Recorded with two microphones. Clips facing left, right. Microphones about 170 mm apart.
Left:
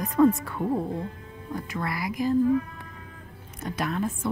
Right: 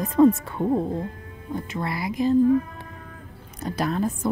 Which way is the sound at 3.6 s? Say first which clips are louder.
Right 3 dB; 35° right (ahead or behind).